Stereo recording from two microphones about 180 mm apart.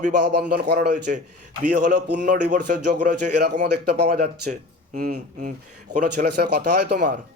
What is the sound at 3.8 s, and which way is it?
Speech, 65° right (ahead or behind).